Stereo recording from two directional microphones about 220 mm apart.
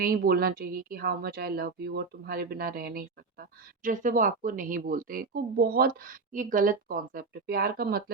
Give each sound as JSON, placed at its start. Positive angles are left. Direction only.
{"t": 0.0, "sound": "speech", "side_deg": -45}